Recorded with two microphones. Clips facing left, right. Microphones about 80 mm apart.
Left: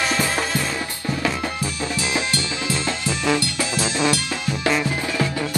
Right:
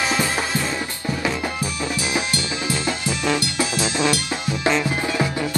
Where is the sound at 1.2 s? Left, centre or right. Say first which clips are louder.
Even; centre.